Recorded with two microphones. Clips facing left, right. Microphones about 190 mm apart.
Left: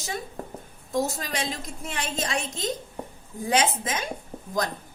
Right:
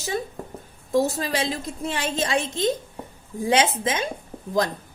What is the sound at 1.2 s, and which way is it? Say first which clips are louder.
A woman's voice: right 5 dB; 30° right (ahead or behind).